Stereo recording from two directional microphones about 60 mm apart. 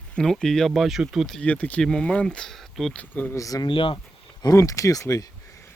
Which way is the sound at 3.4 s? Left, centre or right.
Left.